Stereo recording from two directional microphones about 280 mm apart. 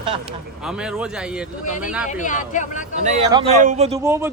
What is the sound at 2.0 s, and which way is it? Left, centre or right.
Speech, left.